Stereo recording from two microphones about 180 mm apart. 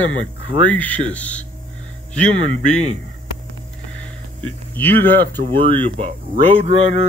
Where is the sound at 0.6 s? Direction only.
10° left (ahead or behind).